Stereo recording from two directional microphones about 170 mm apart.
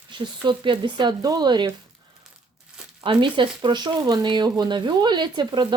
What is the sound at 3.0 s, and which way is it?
Speech, 30° right (ahead or behind).